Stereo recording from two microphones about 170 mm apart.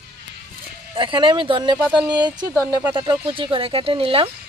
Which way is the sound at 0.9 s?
30° right (ahead or behind).